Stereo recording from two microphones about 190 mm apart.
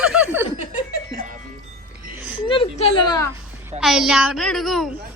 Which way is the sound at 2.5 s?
25° left (ahead or behind).